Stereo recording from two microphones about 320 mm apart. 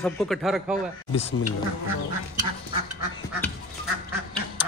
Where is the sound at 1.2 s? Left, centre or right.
Left.